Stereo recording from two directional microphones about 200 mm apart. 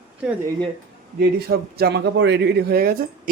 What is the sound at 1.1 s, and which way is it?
Speech, 50° right (ahead or behind).